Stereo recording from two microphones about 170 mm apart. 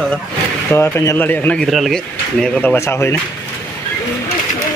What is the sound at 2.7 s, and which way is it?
Speech, 15° left (ahead or behind).